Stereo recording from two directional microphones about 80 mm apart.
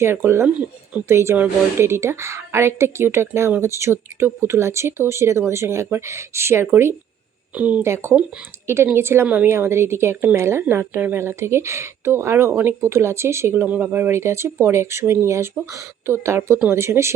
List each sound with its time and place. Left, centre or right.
0.0 s a woman's voice: right
1.0 s a woman's voice: right
7.5 s speech: centre
7.8 s a woman's voice: right
9.5 s a woman's voice: right